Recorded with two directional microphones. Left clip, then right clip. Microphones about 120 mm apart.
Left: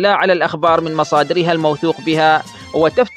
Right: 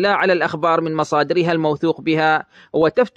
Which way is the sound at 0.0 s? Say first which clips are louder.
Left 3 dB; 45° left (ahead or behind).